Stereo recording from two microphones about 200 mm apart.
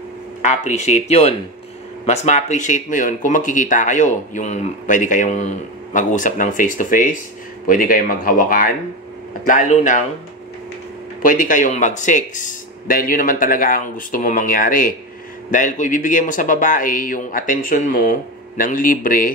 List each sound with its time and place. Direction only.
0.4 s speech: 35° left (ahead or behind)
11.2 s speech: 40° left (ahead or behind)